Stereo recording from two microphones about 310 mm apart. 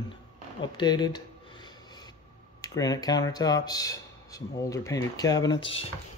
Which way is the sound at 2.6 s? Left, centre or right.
Centre.